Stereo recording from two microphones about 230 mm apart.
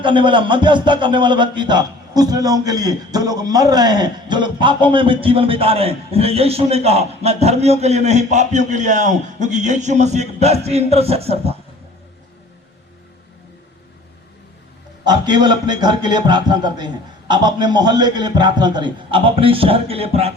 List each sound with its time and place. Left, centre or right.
0.0 s speech: right
15.0 s speech: centre